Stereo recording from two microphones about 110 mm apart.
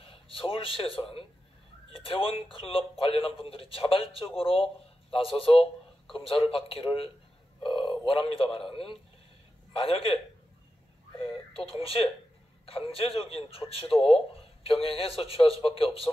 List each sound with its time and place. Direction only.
0.0 s a man's voice: 55° left (ahead or behind)
11.1 s a man's voice: 60° left (ahead or behind)